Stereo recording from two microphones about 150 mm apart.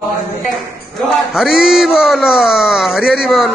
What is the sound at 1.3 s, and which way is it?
Speech, 5° right (ahead or behind).